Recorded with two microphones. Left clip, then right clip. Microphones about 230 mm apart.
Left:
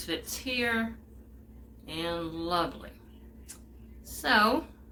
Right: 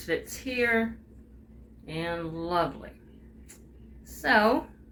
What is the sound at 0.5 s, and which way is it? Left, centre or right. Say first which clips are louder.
Speech: right 4 dB; centre.